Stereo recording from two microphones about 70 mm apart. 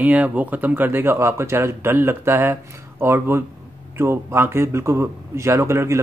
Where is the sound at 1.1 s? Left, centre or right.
Right.